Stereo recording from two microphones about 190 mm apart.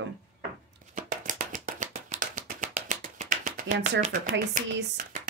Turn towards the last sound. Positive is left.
turn(degrees=-45)  # may be behind; listen again after turning